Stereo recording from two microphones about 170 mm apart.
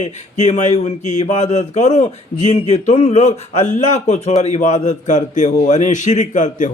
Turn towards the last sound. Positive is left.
turn(degrees=45)  # may be behind; listen again after turning